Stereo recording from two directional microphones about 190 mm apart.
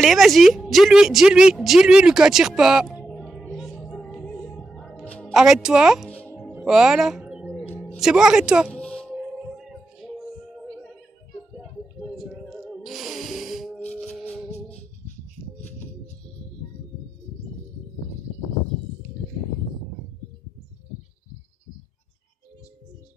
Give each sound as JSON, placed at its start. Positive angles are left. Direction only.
{"t": 0.0, "sound": "a woman's voice", "side_deg": 0}
{"t": 3.1, "sound": "music", "side_deg": 0}
{"t": 5.3, "sound": "a woman's voice", "side_deg": 0}
{"t": 6.0, "sound": "music", "side_deg": 5}
{"t": 7.6, "sound": "music", "side_deg": 10}
{"t": 8.0, "sound": "a woman's voice", "side_deg": -5}
{"t": 8.7, "sound": "music", "side_deg": 5}
{"t": 12.0, "sound": "music", "side_deg": 0}